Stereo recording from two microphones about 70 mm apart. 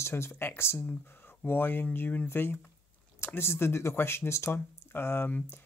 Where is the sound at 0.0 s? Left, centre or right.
Left.